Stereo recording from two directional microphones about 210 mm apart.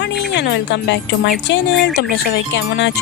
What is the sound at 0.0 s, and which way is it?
Speech, 55° left (ahead or behind).